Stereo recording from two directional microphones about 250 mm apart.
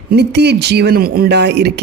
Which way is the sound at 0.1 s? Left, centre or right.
Right.